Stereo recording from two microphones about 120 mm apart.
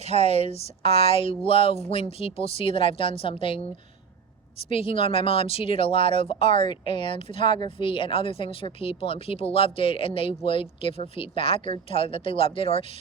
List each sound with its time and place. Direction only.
0.3 s speech: 55° left (ahead or behind)
4.8 s speech: 50° left (ahead or behind)